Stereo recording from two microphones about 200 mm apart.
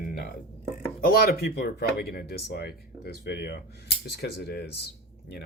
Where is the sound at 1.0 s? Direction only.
50° left (ahead or behind).